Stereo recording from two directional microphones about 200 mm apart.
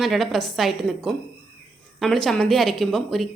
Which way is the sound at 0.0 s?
Centre (ahead or behind).